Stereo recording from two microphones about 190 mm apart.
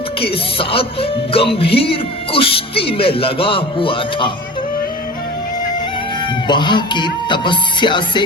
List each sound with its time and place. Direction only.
0.2 s speech: 30° left (ahead or behind)
6.5 s speech: 25° left (ahead or behind)